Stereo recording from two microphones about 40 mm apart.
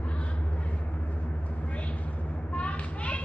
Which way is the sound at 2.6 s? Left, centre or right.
Left.